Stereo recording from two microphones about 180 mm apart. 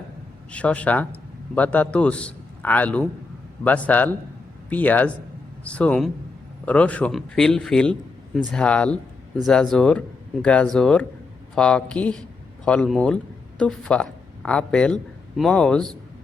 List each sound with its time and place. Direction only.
0.5 s a man's voice: 5° left (ahead or behind)